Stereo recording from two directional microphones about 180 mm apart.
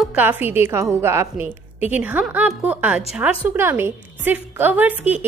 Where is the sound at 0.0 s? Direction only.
10° right (ahead or behind).